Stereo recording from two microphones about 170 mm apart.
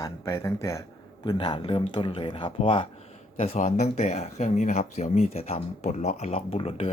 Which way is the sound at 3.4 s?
45° left (ahead or behind).